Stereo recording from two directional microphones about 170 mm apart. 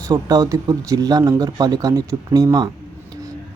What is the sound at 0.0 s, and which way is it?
Speech, 20° right (ahead or behind).